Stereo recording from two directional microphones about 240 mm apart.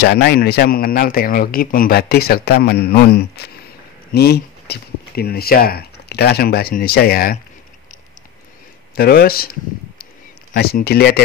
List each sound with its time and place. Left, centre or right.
0.0 s speech: left
8.9 s speech: left